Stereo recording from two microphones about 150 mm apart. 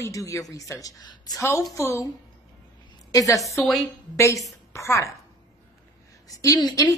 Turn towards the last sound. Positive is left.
turn(degrees=25)  # may be behind; listen again after turning